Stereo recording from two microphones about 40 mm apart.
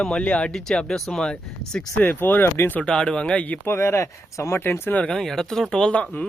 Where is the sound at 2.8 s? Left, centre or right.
Left.